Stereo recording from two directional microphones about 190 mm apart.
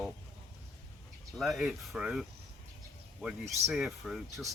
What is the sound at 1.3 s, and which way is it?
Speech, centre (ahead or behind).